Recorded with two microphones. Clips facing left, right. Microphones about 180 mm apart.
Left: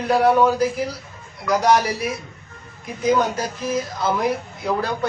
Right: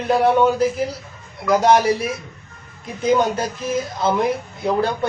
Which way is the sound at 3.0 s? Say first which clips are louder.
Right 2 dB; 25° right (ahead or behind).